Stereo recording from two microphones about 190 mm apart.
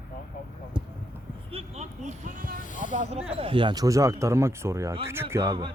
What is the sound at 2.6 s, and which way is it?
Speech, 45° left (ahead or behind).